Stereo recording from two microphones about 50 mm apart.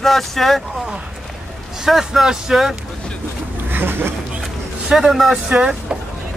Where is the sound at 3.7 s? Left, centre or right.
Right.